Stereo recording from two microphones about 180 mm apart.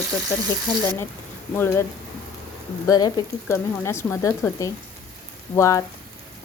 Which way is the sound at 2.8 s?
20° left (ahead or behind).